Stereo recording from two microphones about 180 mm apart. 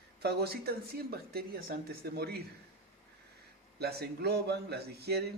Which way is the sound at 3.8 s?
60° right (ahead or behind).